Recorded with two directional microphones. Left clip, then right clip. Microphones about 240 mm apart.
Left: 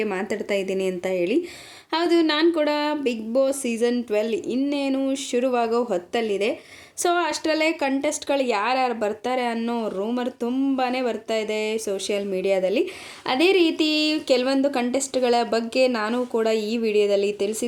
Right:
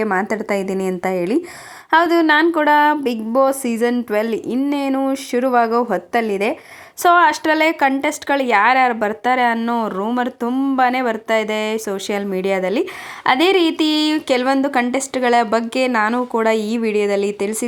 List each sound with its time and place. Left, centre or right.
0.0 s a woman's voice: centre
0.3 s speech: right